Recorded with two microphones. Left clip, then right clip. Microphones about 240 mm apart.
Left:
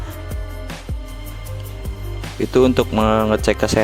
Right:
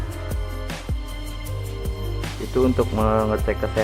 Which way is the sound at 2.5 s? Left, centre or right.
Left.